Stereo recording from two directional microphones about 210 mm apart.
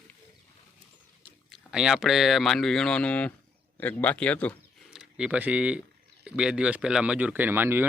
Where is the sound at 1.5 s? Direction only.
Centre (ahead or behind).